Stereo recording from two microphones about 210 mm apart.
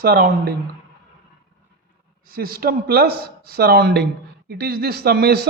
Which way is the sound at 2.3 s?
45° right (ahead or behind).